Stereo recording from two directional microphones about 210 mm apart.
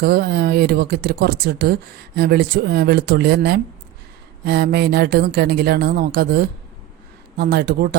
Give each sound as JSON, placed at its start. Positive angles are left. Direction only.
{"t": 0.0, "sound": "speech", "side_deg": -50}